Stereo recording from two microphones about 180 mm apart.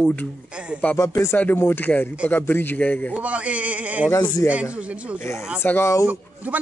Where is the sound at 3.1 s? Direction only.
5° right (ahead or behind).